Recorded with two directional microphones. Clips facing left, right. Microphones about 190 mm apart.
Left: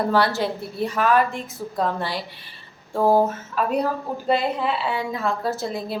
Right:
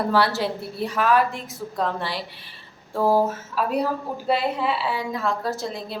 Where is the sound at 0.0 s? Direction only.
Centre (ahead or behind).